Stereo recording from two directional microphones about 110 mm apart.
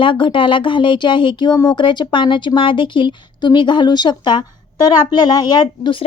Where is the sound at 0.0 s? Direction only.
50° left (ahead or behind).